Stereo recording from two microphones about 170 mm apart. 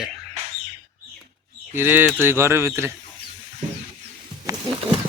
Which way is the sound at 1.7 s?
10° right (ahead or behind).